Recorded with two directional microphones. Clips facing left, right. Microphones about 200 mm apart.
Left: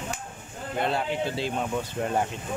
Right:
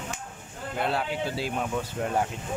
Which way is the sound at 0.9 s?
5° right (ahead or behind).